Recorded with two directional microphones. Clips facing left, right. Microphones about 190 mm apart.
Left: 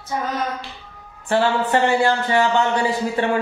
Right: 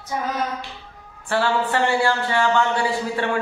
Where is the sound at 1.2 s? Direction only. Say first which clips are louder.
Left 2 dB; 20° left (ahead or behind).